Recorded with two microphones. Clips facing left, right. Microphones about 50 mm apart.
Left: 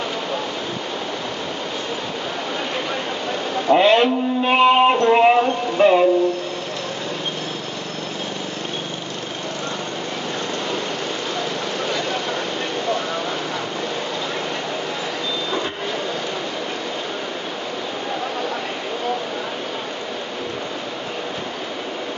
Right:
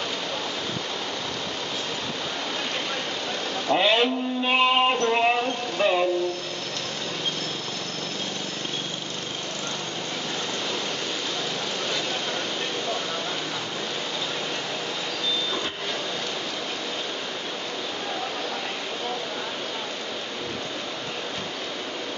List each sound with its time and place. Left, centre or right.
3.6 s speech: centre